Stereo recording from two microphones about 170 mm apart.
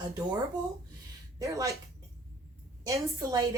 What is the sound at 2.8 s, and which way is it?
Speech, 20° right (ahead or behind).